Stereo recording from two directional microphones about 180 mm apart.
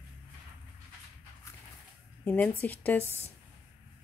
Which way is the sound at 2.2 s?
10° left (ahead or behind).